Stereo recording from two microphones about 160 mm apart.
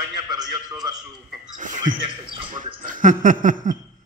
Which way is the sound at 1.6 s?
55° right (ahead or behind).